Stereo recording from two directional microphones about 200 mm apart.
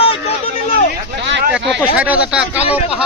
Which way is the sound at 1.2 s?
60° right (ahead or behind).